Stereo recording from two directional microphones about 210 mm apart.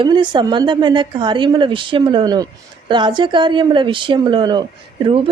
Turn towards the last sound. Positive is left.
turn(degrees=-25)  # may be behind; listen again after turning